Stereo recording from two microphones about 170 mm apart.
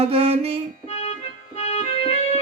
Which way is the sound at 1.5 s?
40° left (ahead or behind).